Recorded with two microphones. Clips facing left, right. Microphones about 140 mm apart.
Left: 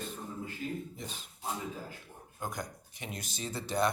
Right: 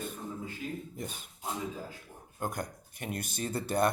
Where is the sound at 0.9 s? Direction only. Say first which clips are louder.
Right 3 dB; 50° right (ahead or behind).